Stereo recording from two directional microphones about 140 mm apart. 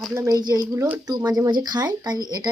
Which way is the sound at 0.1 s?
20° right (ahead or behind).